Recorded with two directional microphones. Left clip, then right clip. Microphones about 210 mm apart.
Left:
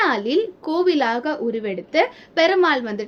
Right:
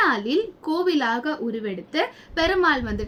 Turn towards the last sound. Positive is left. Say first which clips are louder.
# left 2 dB
turn(degrees=-25)  # may be behind; listen again after turning